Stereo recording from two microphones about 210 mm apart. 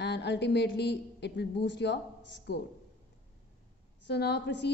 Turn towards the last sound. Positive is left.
turn(degrees=55)  # may be behind; listen again after turning